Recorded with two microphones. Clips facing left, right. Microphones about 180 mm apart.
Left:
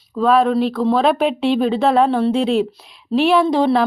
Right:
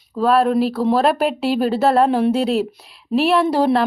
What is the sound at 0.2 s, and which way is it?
Speech, 5° right (ahead or behind).